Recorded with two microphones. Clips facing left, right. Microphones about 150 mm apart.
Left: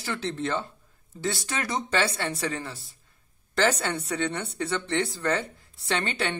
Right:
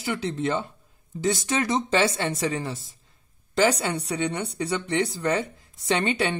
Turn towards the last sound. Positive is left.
turn(degrees=-15)  # may be behind; listen again after turning